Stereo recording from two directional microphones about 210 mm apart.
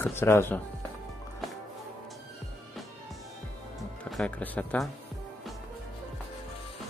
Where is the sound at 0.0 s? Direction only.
10° left (ahead or behind).